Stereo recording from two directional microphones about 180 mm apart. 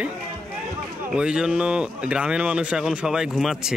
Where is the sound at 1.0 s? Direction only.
5° right (ahead or behind).